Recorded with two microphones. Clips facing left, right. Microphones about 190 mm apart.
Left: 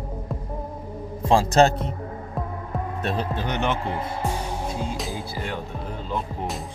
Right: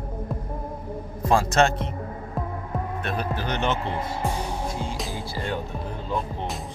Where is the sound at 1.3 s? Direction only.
35° left (ahead or behind).